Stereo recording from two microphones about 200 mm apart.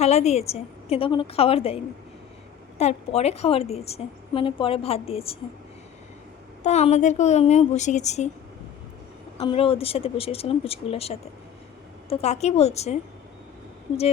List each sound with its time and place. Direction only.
0.0 s a woman's voice: 35° left (ahead or behind)
6.6 s a woman's voice: 35° left (ahead or behind)
9.4 s a woman's voice: 30° left (ahead or behind)